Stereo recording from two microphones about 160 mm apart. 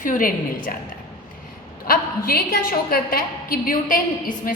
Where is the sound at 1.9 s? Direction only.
65° left (ahead or behind).